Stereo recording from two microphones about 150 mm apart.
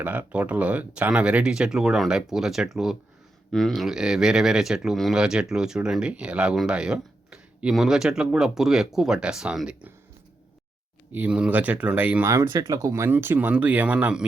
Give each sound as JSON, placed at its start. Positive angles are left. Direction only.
{"t": 0.0, "sound": "speech", "side_deg": -10}
{"t": 11.1, "sound": "speech", "side_deg": -10}